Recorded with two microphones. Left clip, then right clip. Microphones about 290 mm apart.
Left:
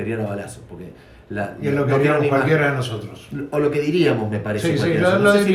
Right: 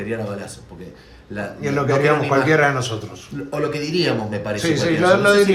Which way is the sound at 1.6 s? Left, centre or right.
Right.